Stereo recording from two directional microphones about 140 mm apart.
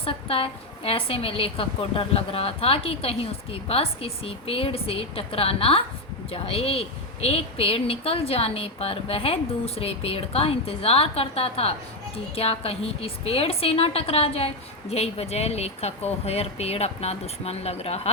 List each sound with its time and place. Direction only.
0.0 s a woman's voice: 40° left (ahead or behind)